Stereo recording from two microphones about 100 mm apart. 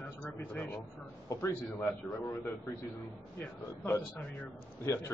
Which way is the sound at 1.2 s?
30° left (ahead or behind).